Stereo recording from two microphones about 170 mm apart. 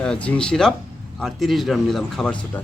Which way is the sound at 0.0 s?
5° left (ahead or behind).